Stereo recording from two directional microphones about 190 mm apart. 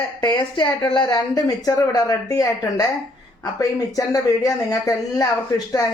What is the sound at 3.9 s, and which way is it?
Speech, 20° left (ahead or behind).